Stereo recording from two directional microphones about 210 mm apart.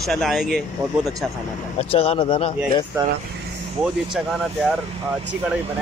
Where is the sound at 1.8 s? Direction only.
30° left (ahead or behind).